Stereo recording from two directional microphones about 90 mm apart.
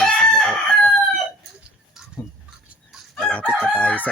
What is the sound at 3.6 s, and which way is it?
Crowing, 15° left (ahead or behind).